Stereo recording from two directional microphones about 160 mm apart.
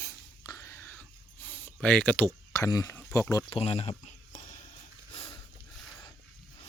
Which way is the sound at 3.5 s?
40° left (ahead or behind).